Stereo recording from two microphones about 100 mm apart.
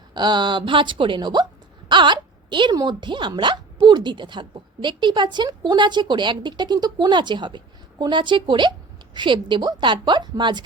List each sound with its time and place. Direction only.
0.1 s speech: 45° right (ahead or behind)
1.9 s a sound: 50° right (ahead or behind)
2.7 s speech: 50° right (ahead or behind)